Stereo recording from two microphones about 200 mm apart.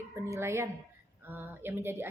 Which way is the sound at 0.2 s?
15° right (ahead or behind).